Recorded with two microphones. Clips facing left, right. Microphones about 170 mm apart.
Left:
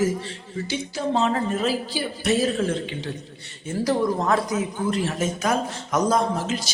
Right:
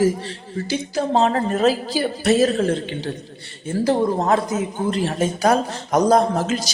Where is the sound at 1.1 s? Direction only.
40° right (ahead or behind).